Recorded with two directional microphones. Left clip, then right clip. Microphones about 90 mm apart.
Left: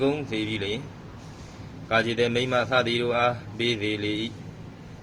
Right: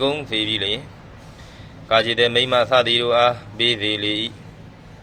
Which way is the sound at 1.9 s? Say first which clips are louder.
Right 7 dB; 35° left (ahead or behind).